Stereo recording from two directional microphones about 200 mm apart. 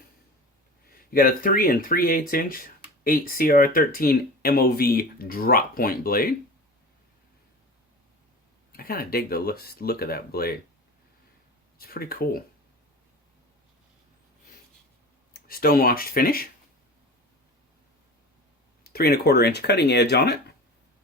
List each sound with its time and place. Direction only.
1.1 s speech: 45° left (ahead or behind)
8.7 s speech: 50° left (ahead or behind)
11.8 s speech: 50° left (ahead or behind)
15.3 s speech: 50° left (ahead or behind)
18.8 s speech: 50° left (ahead or behind)